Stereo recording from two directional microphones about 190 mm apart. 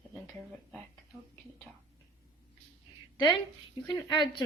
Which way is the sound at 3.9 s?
25° left (ahead or behind).